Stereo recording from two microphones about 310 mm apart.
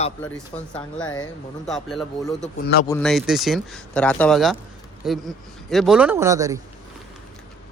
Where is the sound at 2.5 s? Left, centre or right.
Left.